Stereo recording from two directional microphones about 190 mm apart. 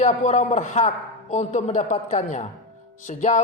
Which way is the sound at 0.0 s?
35° left (ahead or behind).